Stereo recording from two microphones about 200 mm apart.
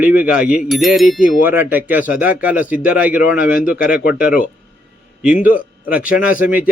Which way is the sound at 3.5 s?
45° left (ahead or behind).